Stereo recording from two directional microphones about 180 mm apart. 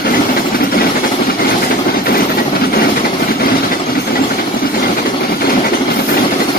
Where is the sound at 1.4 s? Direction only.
55° left (ahead or behind).